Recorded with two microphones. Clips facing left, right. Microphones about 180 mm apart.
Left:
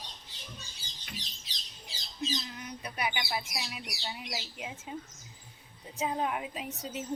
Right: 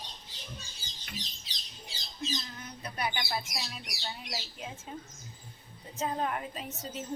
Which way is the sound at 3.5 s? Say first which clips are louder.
Left 1 dB; 10° left (ahead or behind).